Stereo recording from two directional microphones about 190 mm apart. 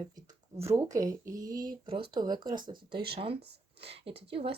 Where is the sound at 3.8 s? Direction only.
30° right (ahead or behind).